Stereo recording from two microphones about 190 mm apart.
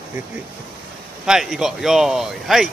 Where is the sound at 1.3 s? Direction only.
Centre (ahead or behind).